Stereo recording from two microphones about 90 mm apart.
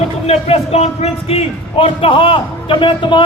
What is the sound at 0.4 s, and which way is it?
A man's voice, 90° left.